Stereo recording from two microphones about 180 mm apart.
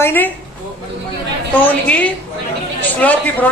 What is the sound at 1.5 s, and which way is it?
A woman's voice, 10° left (ahead or behind).